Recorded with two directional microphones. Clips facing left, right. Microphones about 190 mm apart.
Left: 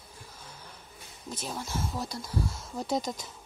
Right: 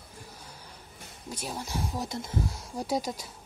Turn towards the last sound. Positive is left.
turn(degrees=-10)  # may be behind; listen again after turning